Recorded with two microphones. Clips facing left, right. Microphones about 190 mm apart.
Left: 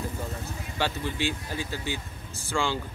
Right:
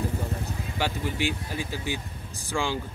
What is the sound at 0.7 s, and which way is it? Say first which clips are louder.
Speech: even; 15° right (ahead or behind).